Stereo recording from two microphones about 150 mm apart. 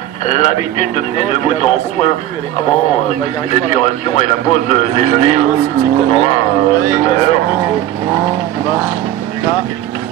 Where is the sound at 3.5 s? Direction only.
50° left (ahead or behind).